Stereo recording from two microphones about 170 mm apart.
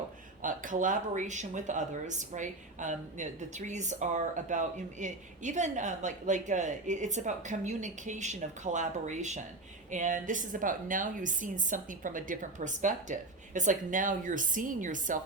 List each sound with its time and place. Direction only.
0.4 s speech: 50° right (ahead or behind)